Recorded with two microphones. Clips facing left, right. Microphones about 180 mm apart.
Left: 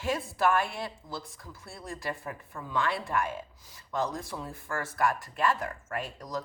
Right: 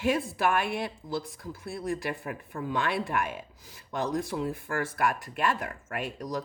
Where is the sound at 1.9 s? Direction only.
65° right (ahead or behind).